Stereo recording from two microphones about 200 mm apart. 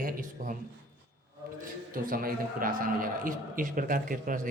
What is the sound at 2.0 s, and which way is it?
A man's voice, 45° right (ahead or behind).